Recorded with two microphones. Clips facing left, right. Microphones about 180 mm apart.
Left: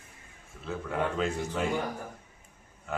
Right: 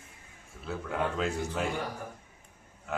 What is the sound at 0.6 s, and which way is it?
A man's voice, centre (ahead or behind).